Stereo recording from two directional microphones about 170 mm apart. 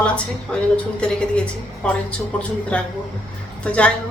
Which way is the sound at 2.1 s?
5° left (ahead or behind).